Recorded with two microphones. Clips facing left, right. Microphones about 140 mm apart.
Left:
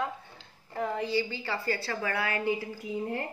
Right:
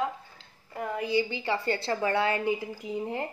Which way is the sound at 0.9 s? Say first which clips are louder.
Right 6 dB; 15° right (ahead or behind).